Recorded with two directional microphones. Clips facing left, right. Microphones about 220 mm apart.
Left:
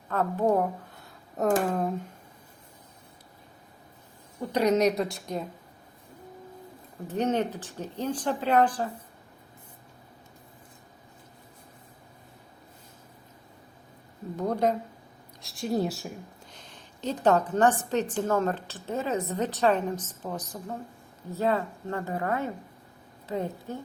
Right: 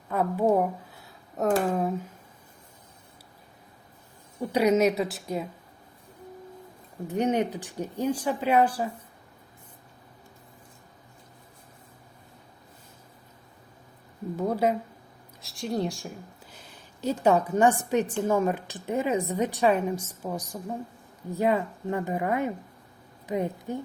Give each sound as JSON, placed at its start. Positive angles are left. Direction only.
{"t": 0.1, "sound": "speech", "side_deg": -10}
{"t": 4.5, "sound": "speech", "side_deg": -10}
{"t": 7.1, "sound": "a woman's voice", "side_deg": -15}
{"t": 14.3, "sound": "a woman's voice", "side_deg": -5}
{"t": 16.5, "sound": "a woman's voice", "side_deg": -10}